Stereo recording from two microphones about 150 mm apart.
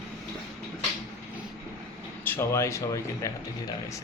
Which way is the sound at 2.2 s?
15° left (ahead or behind).